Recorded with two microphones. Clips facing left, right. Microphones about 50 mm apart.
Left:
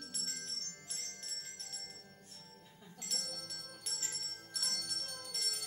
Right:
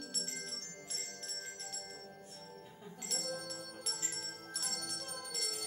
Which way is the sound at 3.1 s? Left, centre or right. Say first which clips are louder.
Right 6 dB; centre.